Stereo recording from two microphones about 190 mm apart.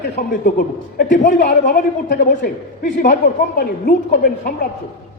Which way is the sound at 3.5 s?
55° left (ahead or behind).